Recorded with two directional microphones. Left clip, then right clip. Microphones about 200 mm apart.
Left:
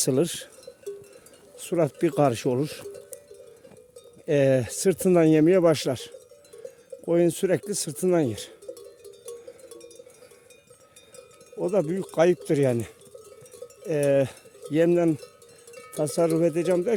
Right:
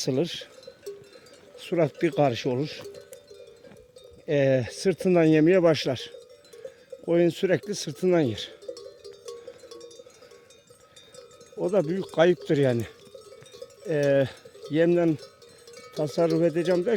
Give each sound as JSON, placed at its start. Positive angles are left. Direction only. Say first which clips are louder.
{"t": 0.0, "sound": "speech", "louder": "left 3 dB", "side_deg": 30}
{"t": 1.5, "sound": "speech", "louder": "even", "side_deg": 10}
{"t": 4.3, "sound": "speech", "louder": "left 2 dB", "side_deg": 25}
{"t": 8.7, "sound": "cowbell", "louder": "right 2 dB", "side_deg": -25}
{"t": 11.6, "sound": "speech", "louder": "even", "side_deg": 5}